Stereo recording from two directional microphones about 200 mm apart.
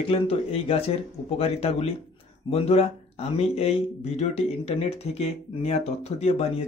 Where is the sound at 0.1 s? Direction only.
30° left (ahead or behind).